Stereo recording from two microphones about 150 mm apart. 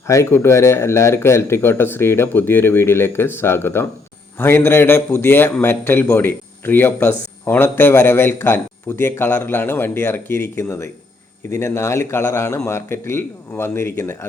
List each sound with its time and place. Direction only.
0.1 s speech: 20° left (ahead or behind)